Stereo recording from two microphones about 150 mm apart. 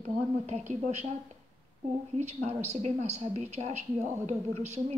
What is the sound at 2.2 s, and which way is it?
A woman's voice, 45° right (ahead or behind).